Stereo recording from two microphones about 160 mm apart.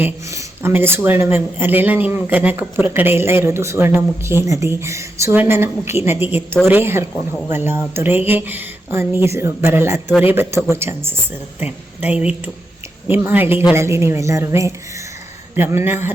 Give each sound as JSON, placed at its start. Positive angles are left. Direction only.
{"t": 0.0, "sound": "speech", "side_deg": -15}